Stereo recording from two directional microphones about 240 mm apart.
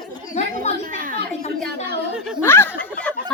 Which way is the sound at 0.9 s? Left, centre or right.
Right.